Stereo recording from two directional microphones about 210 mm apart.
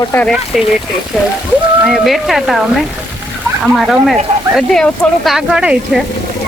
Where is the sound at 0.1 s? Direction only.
5° left (ahead or behind).